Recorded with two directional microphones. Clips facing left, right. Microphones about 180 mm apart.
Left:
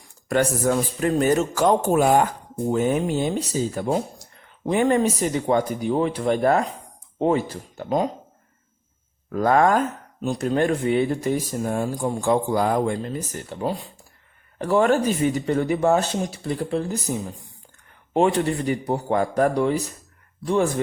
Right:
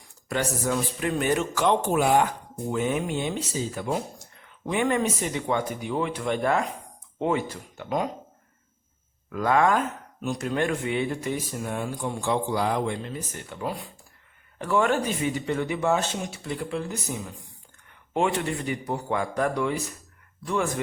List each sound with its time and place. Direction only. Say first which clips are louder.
0.3 s speech: left 6 dB; 50° left (ahead or behind); by 8.1 s 30° left (ahead or behind)
9.3 s speech: left 4 dB; 40° left (ahead or behind)